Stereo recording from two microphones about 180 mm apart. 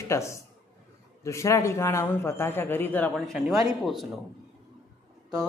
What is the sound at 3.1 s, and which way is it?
Speech, centre (ahead or behind).